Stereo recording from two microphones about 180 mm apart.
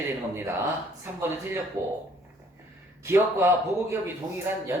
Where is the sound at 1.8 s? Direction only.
15° right (ahead or behind).